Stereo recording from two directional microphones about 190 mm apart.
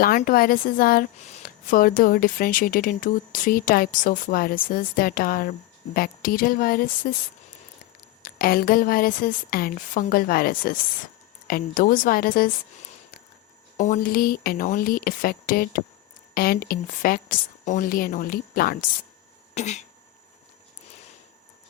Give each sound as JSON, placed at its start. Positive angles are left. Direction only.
{"t": 0.0, "sound": "speech", "side_deg": 50}
{"t": 8.2, "sound": "speech", "side_deg": 50}
{"t": 13.7, "sound": "speech", "side_deg": 45}
{"t": 19.5, "sound": "cough", "side_deg": 35}